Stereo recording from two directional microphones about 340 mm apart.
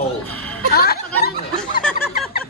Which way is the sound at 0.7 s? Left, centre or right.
Left.